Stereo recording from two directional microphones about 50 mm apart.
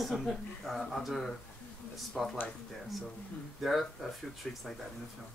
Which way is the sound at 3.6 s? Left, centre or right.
Centre.